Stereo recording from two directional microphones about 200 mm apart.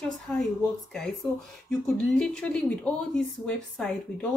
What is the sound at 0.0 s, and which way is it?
Speech, 5° left (ahead or behind).